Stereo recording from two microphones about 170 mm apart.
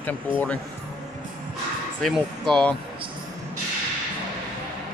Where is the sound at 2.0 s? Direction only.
5° left (ahead or behind).